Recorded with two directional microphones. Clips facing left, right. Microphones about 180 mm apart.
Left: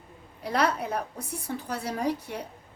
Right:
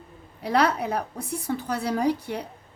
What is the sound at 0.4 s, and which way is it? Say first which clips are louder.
A woman's voice: right 4 dB; 70° right (ahead or behind).